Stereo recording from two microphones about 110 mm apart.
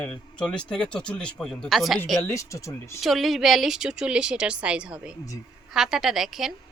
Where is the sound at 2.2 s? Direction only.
25° left (ahead or behind).